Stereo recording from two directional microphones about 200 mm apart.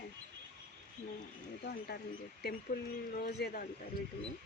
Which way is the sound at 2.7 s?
50° left (ahead or behind).